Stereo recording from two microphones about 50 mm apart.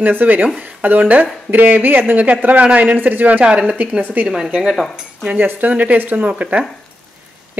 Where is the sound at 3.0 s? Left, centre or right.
Right.